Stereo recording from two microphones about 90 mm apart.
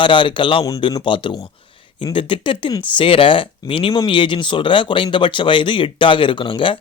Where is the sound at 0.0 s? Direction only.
65° left (ahead or behind).